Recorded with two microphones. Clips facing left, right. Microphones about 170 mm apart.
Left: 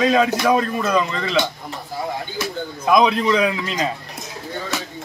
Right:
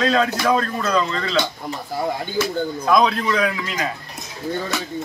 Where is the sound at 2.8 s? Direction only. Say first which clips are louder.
Left 3 dB; 15° left (ahead or behind).